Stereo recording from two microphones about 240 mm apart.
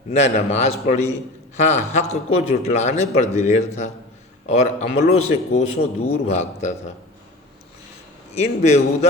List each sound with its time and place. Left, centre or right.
0.2 s speech: left
8.3 s speech: left